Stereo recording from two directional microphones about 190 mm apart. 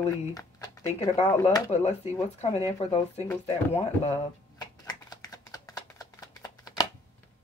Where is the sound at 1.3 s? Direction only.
15° left (ahead or behind).